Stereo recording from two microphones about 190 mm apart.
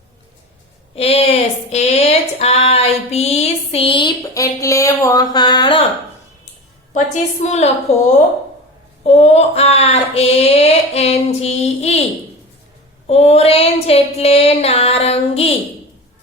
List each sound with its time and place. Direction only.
0.9 s a sound: 30° left (ahead or behind)
1.7 s female singing: 35° left (ahead or behind)
6.9 s speech: 40° left (ahead or behind)
9.0 s speech: 35° left (ahead or behind)
13.1 s speech: 35° left (ahead or behind)